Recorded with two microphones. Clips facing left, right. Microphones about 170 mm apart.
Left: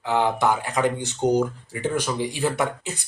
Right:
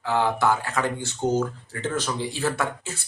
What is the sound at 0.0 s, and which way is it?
Speech, 20° left (ahead or behind).